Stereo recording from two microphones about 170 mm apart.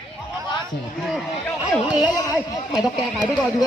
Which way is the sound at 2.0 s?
25° left (ahead or behind).